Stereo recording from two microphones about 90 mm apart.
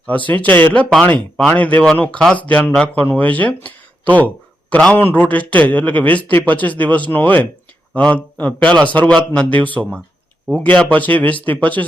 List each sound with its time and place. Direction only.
0.3 s speech: 20° left (ahead or behind)
0.7 s speech: 10° left (ahead or behind)
4.7 s a man's voice: 10° left (ahead or behind)
4.9 s speech: 25° left (ahead or behind)